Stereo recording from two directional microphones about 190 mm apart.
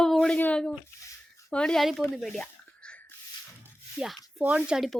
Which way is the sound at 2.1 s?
Centre (ahead or behind).